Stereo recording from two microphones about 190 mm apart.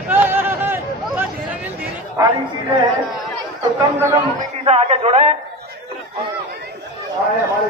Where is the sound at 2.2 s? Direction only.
15° right (ahead or behind).